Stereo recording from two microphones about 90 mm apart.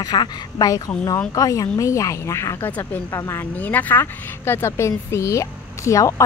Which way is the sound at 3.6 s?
20° left (ahead or behind).